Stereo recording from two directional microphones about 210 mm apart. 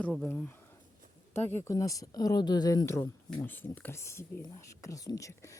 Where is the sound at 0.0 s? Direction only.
5° left (ahead or behind).